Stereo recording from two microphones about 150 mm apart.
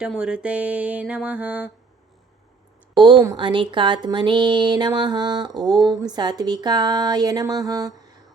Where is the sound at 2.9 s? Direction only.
30° right (ahead or behind).